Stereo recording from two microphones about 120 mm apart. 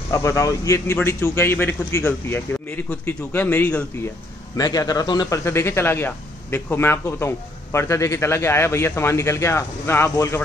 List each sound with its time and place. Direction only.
0.1 s a man's voice: 25° left (ahead or behind)
4.6 s a man's voice: 30° left (ahead or behind)
5.4 s a man's voice: 20° left (ahead or behind)